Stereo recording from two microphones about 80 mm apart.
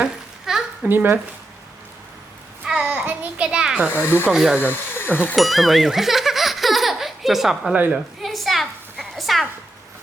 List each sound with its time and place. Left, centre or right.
0.0 s a sound: centre
0.9 s speech: right
2.6 s child singing: centre
2.9 s a child's voice: centre
3.8 s speech: left
4.3 s a child's voice: centre
4.6 s speech: left
5.4 s a sound: centre
7.7 s speech: right
7.9 s a sound: centre